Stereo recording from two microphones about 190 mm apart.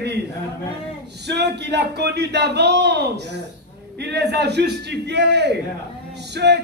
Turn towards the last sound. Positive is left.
turn(degrees=-65)  # may be behind; listen again after turning